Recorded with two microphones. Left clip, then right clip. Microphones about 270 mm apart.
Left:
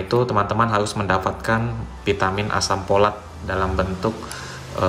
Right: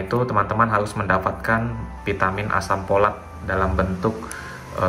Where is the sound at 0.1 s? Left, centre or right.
Centre.